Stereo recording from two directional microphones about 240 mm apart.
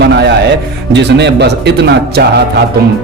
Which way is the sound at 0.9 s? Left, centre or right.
Right.